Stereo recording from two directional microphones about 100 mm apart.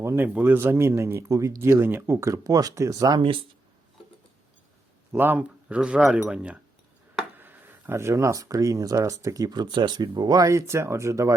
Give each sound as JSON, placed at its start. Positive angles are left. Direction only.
{"t": 0.0, "sound": "speech", "side_deg": -25}
{"t": 3.2, "sound": "speech", "side_deg": -60}
{"t": 5.1, "sound": "speech", "side_deg": -20}
{"t": 7.3, "sound": "speech", "side_deg": -20}